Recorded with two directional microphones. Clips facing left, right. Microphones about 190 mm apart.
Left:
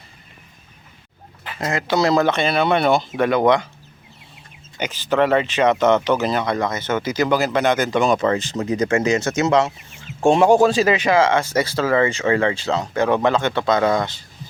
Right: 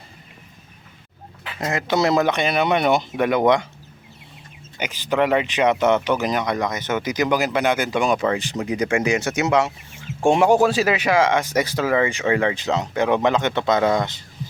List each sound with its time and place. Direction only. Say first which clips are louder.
1.6 s speech: left 1 dB; 20° right (ahead or behind)
4.8 s speech: left 2 dB; 10° right (ahead or behind)